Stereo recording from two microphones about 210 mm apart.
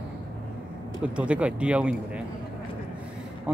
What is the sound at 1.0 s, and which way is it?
Speech, 5° right (ahead or behind).